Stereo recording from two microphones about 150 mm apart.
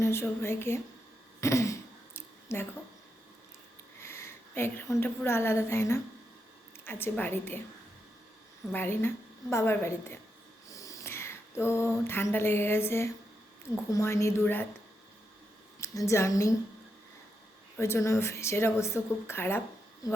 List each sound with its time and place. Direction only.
0.0 s a woman's voice: 15° left (ahead or behind)
1.4 s throat clearing: 20° left (ahead or behind)
4.0 s a woman's voice: 15° left (ahead or behind)
8.7 s a woman's voice: 15° left (ahead or behind)
10.7 s a sound: 20° left (ahead or behind)
13.9 s a woman's voice: 20° left (ahead or behind)
15.8 s a woman's voice: 20° left (ahead or behind)
17.7 s a woman's voice: 15° left (ahead or behind)